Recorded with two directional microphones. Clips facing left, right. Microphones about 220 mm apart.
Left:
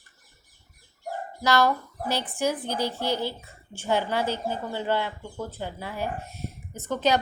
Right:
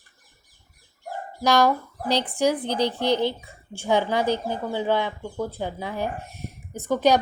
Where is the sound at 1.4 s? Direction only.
15° right (ahead or behind).